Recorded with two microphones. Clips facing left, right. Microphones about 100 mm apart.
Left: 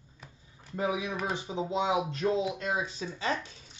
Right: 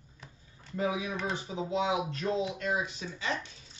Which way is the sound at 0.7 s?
25° left (ahead or behind).